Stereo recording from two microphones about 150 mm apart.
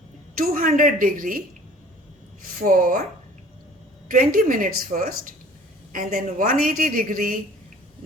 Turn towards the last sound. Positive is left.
turn(degrees=-65)  # may be behind; listen again after turning